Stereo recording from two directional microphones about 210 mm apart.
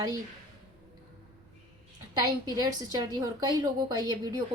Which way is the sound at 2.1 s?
15° right (ahead or behind).